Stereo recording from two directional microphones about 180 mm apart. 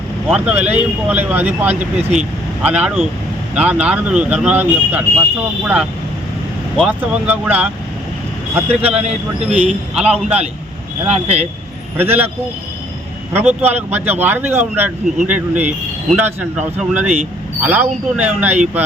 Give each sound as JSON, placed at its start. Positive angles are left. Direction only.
{"t": 0.3, "sound": "speech", "side_deg": -5}
{"t": 6.7, "sound": "speech", "side_deg": -5}
{"t": 9.0, "sound": "speech", "side_deg": -35}
{"t": 9.5, "sound": "a man's voice", "side_deg": -5}
{"t": 11.1, "sound": "speech", "side_deg": -35}
{"t": 11.9, "sound": "speech", "side_deg": -10}
{"t": 13.3, "sound": "speech", "side_deg": -10}